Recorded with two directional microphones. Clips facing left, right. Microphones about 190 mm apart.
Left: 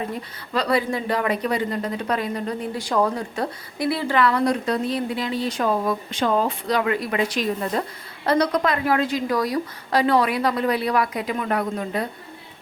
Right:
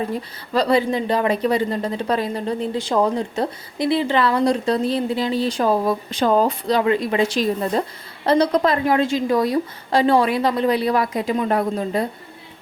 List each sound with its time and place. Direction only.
0.5 s speech: 30° right (ahead or behind)